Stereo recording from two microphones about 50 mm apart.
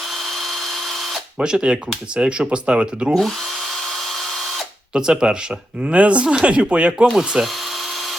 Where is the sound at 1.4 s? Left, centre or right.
Centre.